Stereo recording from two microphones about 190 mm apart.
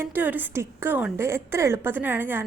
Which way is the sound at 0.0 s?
10° right (ahead or behind).